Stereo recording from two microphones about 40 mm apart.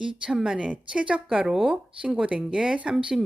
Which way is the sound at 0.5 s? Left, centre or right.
Right.